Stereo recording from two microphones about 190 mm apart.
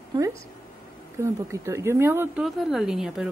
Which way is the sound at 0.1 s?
15° right (ahead or behind).